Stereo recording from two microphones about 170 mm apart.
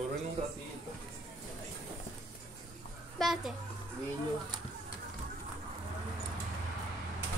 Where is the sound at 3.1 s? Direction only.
Centre (ahead or behind).